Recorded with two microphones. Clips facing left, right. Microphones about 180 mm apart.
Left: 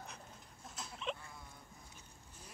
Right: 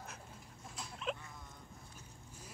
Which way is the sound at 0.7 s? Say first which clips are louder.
Right 1 dB; centre (ahead or behind).